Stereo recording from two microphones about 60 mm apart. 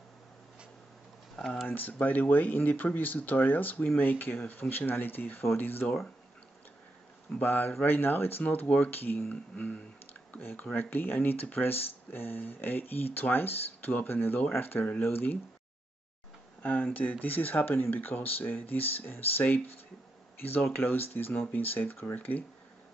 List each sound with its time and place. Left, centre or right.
1.7 s speech: left
7.3 s speech: left
8.6 s speech: left
8.9 s speech: left
16.6 s speech: left
20.7 s speech: left